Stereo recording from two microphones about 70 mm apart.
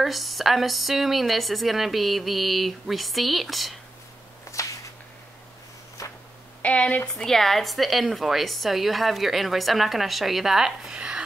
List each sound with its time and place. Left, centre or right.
0.0 s a woman's voice: centre
4.5 s whip: left
6.0 s a sound: left
6.6 s speech: centre
7.2 s a woman's voice: centre